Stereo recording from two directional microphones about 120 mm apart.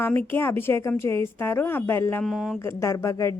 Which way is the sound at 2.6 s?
25° left (ahead or behind).